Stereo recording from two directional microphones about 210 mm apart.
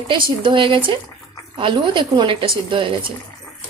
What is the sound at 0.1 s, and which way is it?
Speech, 25° right (ahead or behind).